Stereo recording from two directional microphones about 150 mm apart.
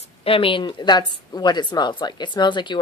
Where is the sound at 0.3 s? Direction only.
35° left (ahead or behind).